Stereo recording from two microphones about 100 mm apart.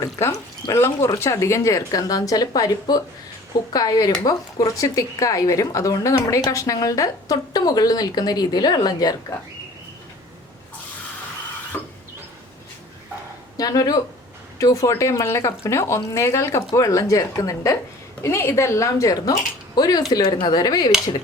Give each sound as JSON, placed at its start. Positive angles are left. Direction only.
{"t": 0.0, "sound": "a woman's voice", "side_deg": 35}
{"t": 11.7, "sound": "printer", "side_deg": 25}
{"t": 13.6, "sound": "a woman's voice", "side_deg": 40}